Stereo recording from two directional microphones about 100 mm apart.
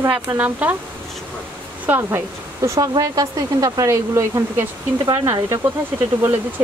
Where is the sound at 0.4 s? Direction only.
15° right (ahead or behind).